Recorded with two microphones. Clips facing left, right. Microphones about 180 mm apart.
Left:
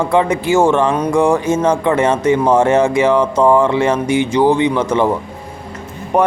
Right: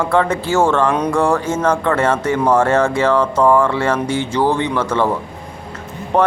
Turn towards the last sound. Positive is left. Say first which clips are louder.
# left 1 dB
turn(degrees=10)  # may be behind; listen again after turning